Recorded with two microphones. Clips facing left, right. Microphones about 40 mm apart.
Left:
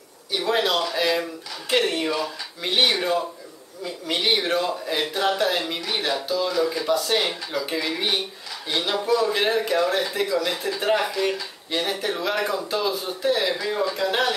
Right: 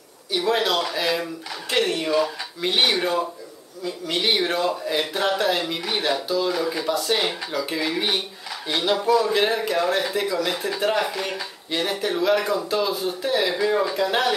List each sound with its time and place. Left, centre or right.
0.3 s speech: centre